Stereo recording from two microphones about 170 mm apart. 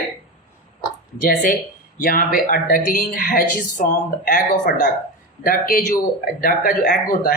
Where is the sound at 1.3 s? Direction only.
55° left (ahead or behind).